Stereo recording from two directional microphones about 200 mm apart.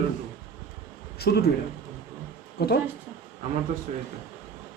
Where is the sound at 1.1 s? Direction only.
50° left (ahead or behind).